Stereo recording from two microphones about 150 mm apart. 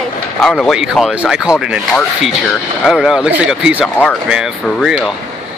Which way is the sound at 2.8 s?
Centre (ahead or behind).